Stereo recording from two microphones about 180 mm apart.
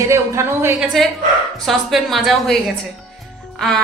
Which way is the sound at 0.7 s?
Centre (ahead or behind).